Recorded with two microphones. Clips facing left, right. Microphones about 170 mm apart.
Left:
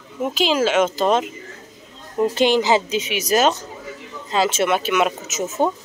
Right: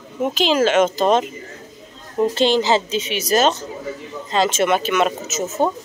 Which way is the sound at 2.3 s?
15° left (ahead or behind).